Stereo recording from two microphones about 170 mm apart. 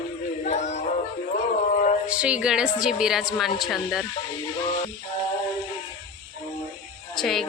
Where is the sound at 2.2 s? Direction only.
5° right (ahead or behind).